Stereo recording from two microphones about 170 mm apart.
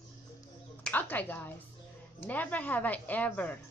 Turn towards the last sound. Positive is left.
turn(degrees=10)  # may be behind; listen again after turning